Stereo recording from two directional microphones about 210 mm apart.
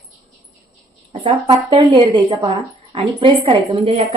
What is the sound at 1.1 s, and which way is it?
A woman's voice, 25° right (ahead or behind).